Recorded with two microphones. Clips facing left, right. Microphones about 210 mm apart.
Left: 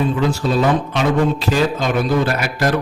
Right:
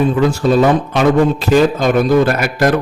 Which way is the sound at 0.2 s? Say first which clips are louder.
Right 5 dB; 50° right (ahead or behind).